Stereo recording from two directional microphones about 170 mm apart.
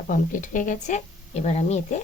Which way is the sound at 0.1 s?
50° left (ahead or behind).